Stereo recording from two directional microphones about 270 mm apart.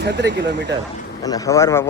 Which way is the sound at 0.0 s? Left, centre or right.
Right.